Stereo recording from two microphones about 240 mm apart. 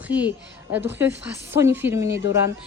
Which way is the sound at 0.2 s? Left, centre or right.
Centre.